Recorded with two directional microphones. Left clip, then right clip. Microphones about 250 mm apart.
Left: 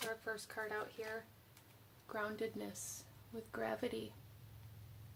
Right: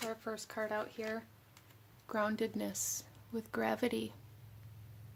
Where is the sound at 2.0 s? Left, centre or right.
Right.